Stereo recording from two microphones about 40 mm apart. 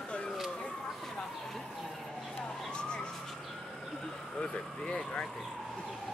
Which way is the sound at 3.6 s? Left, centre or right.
Centre.